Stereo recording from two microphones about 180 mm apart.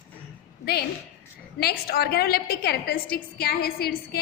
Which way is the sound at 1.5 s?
60° left (ahead or behind).